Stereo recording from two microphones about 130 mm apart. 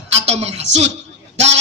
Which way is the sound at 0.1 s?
55° right (ahead or behind).